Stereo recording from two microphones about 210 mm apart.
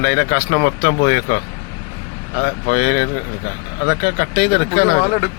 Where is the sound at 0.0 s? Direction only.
50° left (ahead or behind).